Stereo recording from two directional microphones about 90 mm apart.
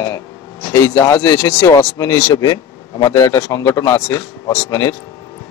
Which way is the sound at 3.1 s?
35° left (ahead or behind).